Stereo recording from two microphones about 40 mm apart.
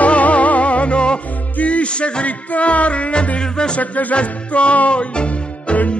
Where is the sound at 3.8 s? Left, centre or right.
Left.